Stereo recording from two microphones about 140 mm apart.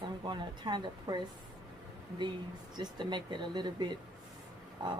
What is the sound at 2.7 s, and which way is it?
A woman's voice, 35° right (ahead or behind).